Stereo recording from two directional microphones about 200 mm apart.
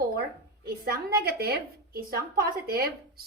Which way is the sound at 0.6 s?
50° right (ahead or behind).